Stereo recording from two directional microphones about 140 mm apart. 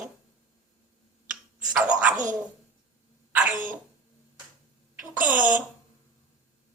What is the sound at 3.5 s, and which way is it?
Throat clearing, 70° right (ahead or behind).